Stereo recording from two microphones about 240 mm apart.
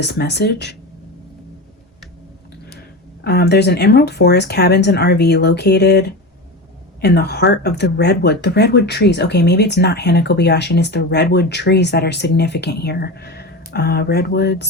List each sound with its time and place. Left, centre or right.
0.0 s speech: left
3.2 s speech: left